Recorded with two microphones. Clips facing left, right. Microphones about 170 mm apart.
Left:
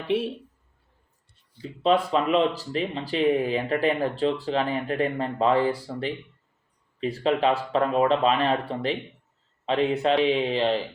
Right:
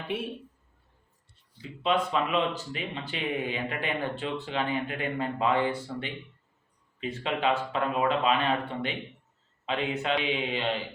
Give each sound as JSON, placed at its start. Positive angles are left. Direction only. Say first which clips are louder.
{"t": 1.6, "sound": "speech", "louder": "left 5 dB", "side_deg": 35}